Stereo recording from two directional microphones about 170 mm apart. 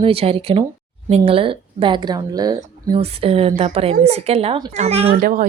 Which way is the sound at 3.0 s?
35° right (ahead or behind).